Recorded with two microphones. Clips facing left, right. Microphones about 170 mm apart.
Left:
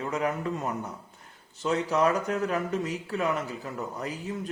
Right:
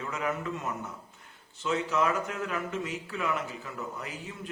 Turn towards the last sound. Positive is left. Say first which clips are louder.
# left 7 dB
turn(degrees=40)  # may be behind; listen again after turning